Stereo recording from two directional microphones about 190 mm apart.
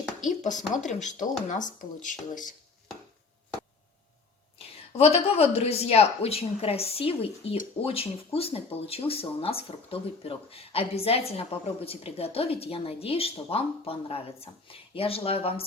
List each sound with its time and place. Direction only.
0.3 s a woman's voice: 40° left (ahead or behind)
4.5 s a woman's voice: 30° left (ahead or behind)